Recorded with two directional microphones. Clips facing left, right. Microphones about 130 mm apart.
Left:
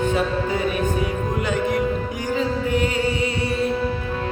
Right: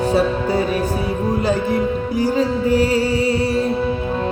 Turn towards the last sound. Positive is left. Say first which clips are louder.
# right 5 dB
turn(degrees=-35)  # may be behind; listen again after turning